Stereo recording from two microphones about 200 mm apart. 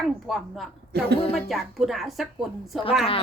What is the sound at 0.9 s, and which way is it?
Speech, 50° right (ahead or behind).